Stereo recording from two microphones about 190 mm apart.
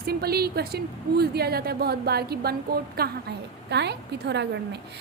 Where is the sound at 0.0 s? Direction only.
55° right (ahead or behind).